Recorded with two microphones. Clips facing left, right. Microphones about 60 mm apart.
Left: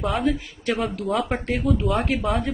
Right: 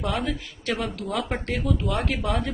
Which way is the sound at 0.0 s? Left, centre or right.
Centre.